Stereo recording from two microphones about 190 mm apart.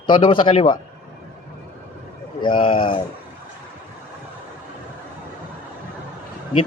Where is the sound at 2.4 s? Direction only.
25° left (ahead or behind).